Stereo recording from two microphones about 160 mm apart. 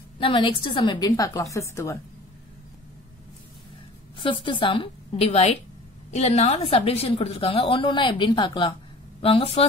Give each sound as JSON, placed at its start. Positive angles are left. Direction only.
{"t": 0.2, "sound": "a woman's voice", "side_deg": 30}
{"t": 4.2, "sound": "a woman's voice", "side_deg": 30}